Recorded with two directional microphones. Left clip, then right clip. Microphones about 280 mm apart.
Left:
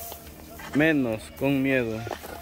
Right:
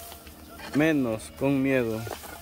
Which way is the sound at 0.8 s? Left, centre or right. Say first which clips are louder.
Left 2 dB; centre.